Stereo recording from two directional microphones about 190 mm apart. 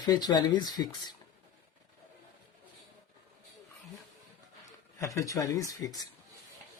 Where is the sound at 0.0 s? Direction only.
20° left (ahead or behind).